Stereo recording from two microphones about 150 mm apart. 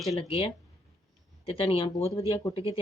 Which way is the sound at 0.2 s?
35° left (ahead or behind).